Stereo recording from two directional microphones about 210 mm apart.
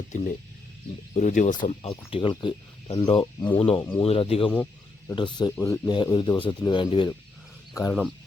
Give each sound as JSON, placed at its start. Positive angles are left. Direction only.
{"t": 0.1, "sound": "speech", "side_deg": 35}
{"t": 4.5, "sound": "a sound", "side_deg": 10}
{"t": 5.1, "sound": "speech", "side_deg": 20}
{"t": 5.5, "sound": "speech", "side_deg": 10}
{"t": 5.9, "sound": "speech", "side_deg": 20}